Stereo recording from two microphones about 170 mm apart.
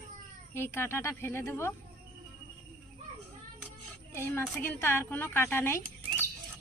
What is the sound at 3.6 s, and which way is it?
Child singing, 15° left (ahead or behind).